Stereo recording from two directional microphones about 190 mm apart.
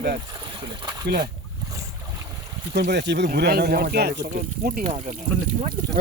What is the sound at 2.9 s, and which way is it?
Speech, 65° right (ahead or behind).